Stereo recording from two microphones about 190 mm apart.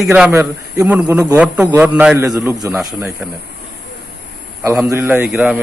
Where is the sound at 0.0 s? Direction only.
5° right (ahead or behind).